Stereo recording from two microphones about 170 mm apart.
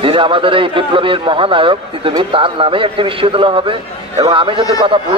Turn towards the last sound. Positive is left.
turn(degrees=-30)  # may be behind; listen again after turning